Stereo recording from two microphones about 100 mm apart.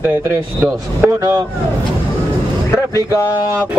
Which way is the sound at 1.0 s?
20° right (ahead or behind).